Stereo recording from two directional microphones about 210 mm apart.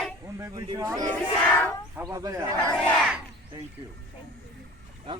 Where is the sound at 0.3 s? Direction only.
20° right (ahead or behind).